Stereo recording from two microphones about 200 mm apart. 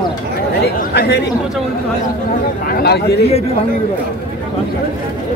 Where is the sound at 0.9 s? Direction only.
55° left (ahead or behind).